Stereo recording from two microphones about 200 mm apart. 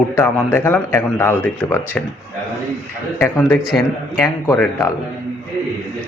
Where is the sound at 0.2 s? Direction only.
10° left (ahead or behind).